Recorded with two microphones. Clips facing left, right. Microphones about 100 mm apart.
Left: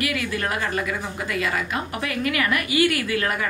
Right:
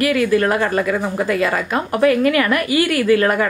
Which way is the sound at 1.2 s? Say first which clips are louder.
Right 5 dB; 45° right (ahead or behind).